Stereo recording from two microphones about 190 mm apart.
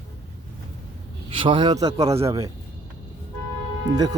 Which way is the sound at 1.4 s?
25° right (ahead or behind).